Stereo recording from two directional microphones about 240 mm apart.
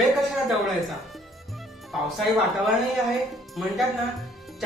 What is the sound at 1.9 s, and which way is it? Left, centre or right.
Speech, centre.